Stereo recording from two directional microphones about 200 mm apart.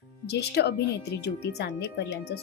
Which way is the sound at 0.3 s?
55° left (ahead or behind).